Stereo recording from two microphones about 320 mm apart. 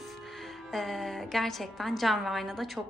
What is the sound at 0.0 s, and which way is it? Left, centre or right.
A woman's voice, centre.